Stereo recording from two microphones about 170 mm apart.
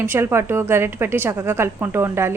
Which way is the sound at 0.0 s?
15° right (ahead or behind).